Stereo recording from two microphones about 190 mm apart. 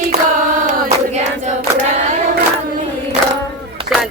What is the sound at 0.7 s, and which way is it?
Choir, 40° right (ahead or behind).